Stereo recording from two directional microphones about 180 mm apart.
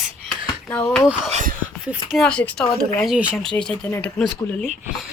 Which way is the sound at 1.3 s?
45° right (ahead or behind).